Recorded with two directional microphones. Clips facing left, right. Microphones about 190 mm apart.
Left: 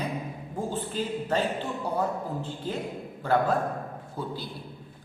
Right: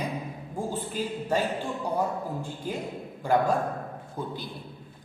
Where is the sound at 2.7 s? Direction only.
10° right (ahead or behind).